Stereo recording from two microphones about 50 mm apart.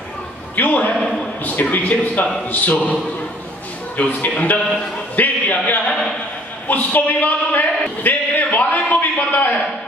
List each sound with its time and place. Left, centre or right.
0.6 s a man's voice: left
3.9 s a man's voice: left
8.0 s a sound: left